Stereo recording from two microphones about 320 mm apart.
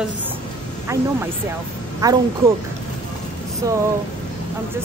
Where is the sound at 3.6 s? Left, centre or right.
Centre.